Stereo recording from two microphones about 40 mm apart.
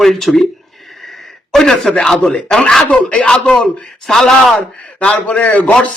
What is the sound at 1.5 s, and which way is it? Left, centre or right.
Speech, centre.